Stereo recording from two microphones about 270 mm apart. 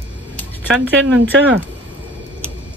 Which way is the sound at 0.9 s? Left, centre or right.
Right.